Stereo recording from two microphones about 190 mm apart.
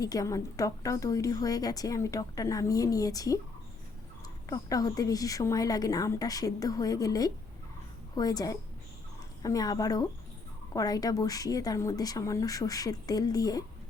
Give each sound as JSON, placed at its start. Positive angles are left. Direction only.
{"t": 0.0, "sound": "a woman's voice", "side_deg": 20}
{"t": 4.4, "sound": "a woman's voice", "side_deg": 20}